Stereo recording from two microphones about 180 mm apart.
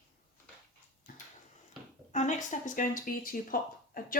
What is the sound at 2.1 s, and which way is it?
Speech, 40° left (ahead or behind).